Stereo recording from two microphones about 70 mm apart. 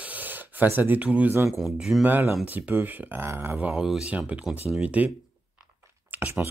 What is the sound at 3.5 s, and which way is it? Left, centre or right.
Speech, centre.